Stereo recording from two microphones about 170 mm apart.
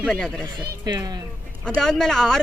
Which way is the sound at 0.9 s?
25° right (ahead or behind).